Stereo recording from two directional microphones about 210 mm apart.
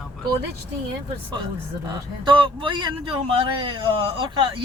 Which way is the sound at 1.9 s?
20° right (ahead or behind).